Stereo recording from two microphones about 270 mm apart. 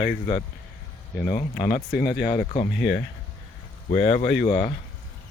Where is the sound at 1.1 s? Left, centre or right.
Left.